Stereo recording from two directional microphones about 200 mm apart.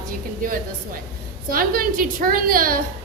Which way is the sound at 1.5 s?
45° right (ahead or behind).